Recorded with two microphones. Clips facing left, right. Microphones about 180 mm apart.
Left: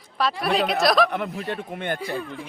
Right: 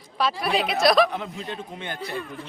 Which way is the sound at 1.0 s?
60° left (ahead or behind).